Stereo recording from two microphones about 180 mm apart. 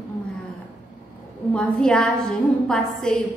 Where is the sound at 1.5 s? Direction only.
5° left (ahead or behind).